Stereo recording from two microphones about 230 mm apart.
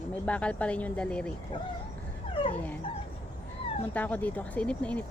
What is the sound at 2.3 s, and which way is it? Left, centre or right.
Dog, left.